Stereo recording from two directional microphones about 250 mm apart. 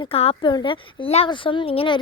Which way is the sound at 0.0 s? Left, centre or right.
Left.